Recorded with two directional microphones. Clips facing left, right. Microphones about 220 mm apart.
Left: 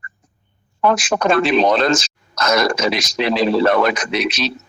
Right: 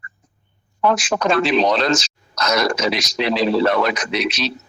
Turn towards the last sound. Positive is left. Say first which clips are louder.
# left 1 dB
turn(degrees=50)  # may be behind; listen again after turning